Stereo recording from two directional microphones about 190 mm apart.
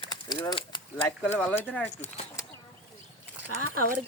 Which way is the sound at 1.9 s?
35° left (ahead or behind).